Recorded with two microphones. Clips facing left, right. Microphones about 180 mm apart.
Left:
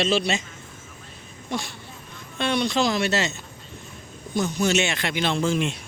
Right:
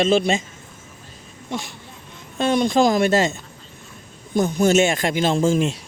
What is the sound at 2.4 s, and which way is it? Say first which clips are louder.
Speech: right 6 dB; 45° right (ahead or behind).